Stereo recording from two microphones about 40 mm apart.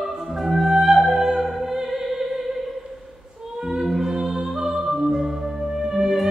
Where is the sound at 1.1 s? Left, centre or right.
Centre.